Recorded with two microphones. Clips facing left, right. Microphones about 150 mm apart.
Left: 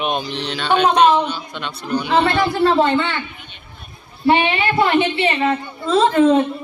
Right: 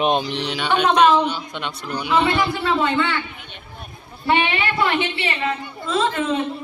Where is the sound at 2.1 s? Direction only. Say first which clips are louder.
Left 1 dB; 40° left (ahead or behind).